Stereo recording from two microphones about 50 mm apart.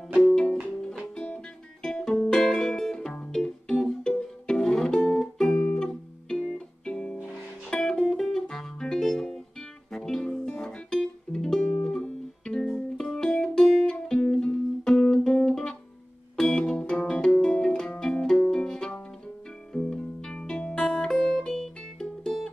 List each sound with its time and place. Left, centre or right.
0.1 s music: centre
1.1 s music: centre